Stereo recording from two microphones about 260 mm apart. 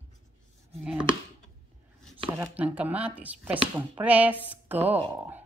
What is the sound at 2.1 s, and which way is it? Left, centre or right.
Speech, right.